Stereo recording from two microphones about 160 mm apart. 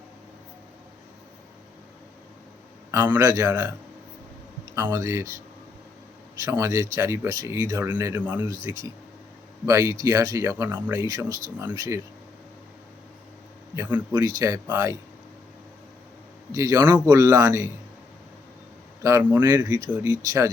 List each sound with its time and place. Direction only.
2.9 s speech: 15° right (ahead or behind)
6.4 s speech: 20° right (ahead or behind)
13.7 s speech: 10° right (ahead or behind)
16.5 s speech: 20° right (ahead or behind)
19.0 s speech: 15° right (ahead or behind)